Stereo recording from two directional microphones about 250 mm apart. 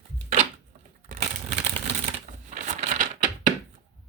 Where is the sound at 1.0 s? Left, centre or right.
Right.